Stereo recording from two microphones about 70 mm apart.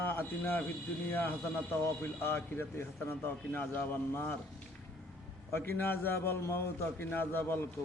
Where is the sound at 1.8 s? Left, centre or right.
Left.